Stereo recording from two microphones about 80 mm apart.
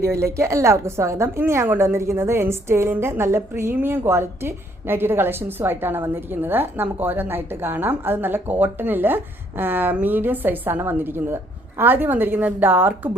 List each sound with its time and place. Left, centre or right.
0.0 s a woman's voice: right